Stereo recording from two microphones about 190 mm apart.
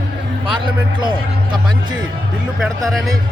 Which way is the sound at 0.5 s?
25° right (ahead or behind).